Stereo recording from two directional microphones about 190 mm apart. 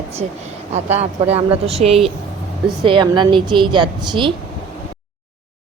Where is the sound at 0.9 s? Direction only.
35° right (ahead or behind).